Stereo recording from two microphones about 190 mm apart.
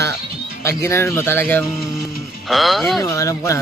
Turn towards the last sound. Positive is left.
turn(degrees=15)  # may be behind; listen again after turning